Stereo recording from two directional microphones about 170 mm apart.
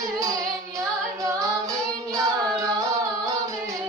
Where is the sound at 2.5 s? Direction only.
20° right (ahead or behind).